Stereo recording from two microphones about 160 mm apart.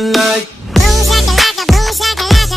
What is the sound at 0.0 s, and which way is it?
Music, centre (ahead or behind).